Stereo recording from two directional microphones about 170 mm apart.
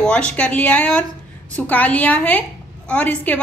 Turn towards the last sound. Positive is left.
turn(degrees=10)  # may be behind; listen again after turning